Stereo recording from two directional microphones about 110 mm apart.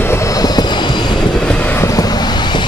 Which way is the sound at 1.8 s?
35° left (ahead or behind).